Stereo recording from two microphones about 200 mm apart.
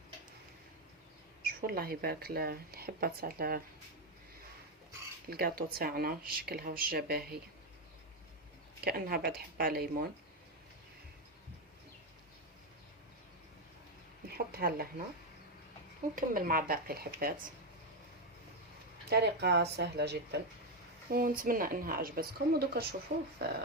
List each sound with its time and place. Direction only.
1.5 s speech: 50° right (ahead or behind)
5.3 s speech: 50° right (ahead or behind)
8.8 s speech: 50° right (ahead or behind)
14.3 s speech: 50° right (ahead or behind)
16.1 s speech: 45° right (ahead or behind)
19.1 s speech: 55° right (ahead or behind)
21.1 s speech: 45° right (ahead or behind)